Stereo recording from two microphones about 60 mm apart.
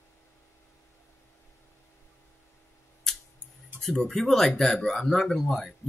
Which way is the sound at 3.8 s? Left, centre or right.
Centre.